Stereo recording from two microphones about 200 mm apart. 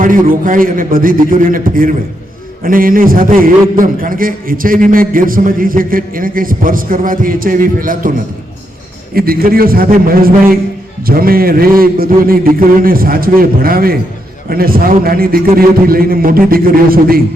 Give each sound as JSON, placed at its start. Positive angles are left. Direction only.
{"t": 0.0, "sound": "a man's voice", "side_deg": -45}
{"t": 9.1, "sound": "a man's voice", "side_deg": -50}